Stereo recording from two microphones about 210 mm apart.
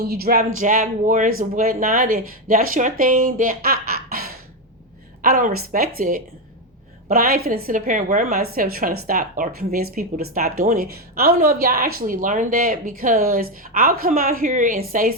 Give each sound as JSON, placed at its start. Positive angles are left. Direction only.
{"t": 0.0, "sound": "speech", "side_deg": -45}